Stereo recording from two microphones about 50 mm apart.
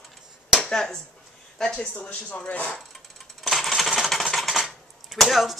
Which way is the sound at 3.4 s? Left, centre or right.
Centre.